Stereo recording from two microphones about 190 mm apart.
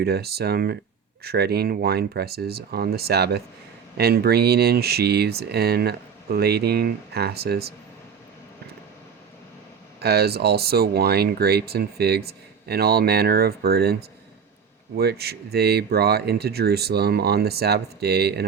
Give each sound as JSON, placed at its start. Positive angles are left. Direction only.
{"t": 0.0, "sound": "speech", "side_deg": -55}
{"t": 10.0, "sound": "speech", "side_deg": -55}
{"t": 14.9, "sound": "speech", "side_deg": -55}